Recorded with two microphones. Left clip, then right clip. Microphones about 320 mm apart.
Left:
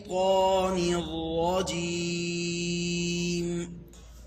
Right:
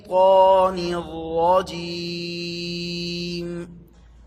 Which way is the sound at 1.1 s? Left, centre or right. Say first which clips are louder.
Right 3 dB; right.